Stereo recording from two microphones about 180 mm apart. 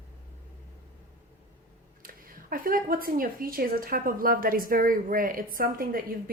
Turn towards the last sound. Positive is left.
turn(degrees=-55)  # may be behind; listen again after turning